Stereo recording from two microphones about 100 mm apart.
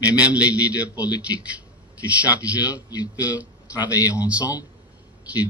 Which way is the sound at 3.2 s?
15° right (ahead or behind).